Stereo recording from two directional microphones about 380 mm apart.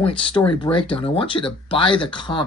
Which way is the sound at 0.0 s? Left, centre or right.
Centre.